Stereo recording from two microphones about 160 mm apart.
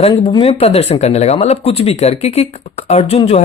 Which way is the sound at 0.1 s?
30° left (ahead or behind).